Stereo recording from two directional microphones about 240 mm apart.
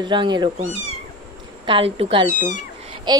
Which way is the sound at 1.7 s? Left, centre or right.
Right.